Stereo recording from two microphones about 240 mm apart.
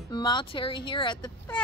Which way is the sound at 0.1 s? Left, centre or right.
Centre.